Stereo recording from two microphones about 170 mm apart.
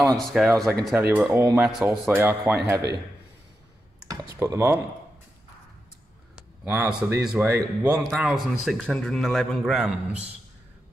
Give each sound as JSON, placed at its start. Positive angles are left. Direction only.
{"t": 0.2, "sound": "a man's voice", "side_deg": 0}
{"t": 1.1, "sound": "speech", "side_deg": -10}
{"t": 1.6, "sound": "a man's voice", "side_deg": 0}
{"t": 2.0, "sound": "speech", "side_deg": -15}
{"t": 4.1, "sound": "speech", "side_deg": -20}
{"t": 6.3, "sound": "speech", "side_deg": -10}
{"t": 7.4, "sound": "speech", "side_deg": -15}
{"t": 8.1, "sound": "a man's voice", "side_deg": 0}